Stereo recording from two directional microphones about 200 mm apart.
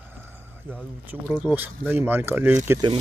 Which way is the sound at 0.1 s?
10° right (ahead or behind).